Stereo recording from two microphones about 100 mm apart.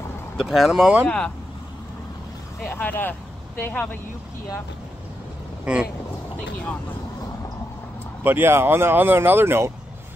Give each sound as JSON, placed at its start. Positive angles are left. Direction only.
{"t": 0.4, "sound": "speech", "side_deg": -5}
{"t": 1.0, "sound": "speech", "side_deg": 15}
{"t": 2.7, "sound": "speech", "side_deg": 20}
{"t": 5.7, "sound": "speech", "side_deg": -10}
{"t": 8.2, "sound": "speech", "side_deg": -20}